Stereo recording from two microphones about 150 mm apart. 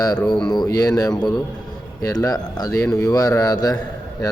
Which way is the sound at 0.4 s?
25° left (ahead or behind).